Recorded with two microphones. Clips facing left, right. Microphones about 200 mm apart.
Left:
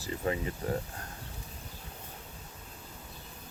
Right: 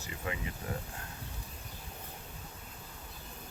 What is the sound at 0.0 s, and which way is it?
Speech, 35° left (ahead or behind).